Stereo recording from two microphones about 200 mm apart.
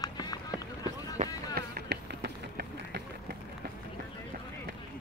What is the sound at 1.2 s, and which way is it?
Run, 40° right (ahead or behind).